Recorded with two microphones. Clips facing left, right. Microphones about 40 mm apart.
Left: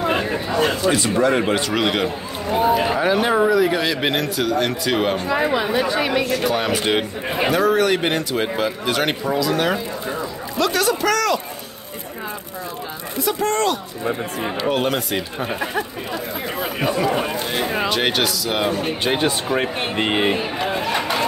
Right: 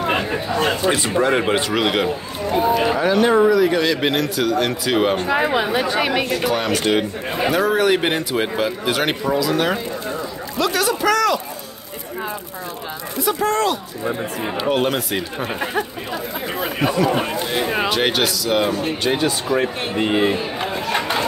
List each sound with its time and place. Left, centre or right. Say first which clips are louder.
0.8 s speech: even; right
1.7 s speech: right 1 dB; centre
5.1 s speech: right 1 dB; right
6.4 s speech: even; centre
6.8 s speech: right 1 dB; centre
7.4 s speech: even; centre
10.6 s a sound: even; centre
13.2 s speech: right 1 dB; centre
17.2 s speech: right 1 dB; centre
19.1 s speech: right 1 dB; left